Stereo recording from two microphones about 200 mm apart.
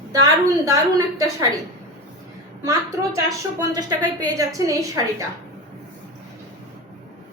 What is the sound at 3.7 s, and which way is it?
A woman's voice, 20° right (ahead or behind).